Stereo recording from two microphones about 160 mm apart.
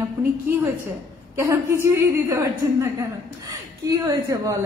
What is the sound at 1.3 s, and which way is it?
A woman's voice, 15° right (ahead or behind).